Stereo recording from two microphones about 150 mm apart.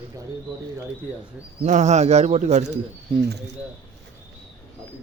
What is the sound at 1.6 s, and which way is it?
Speech, 50° right (ahead or behind).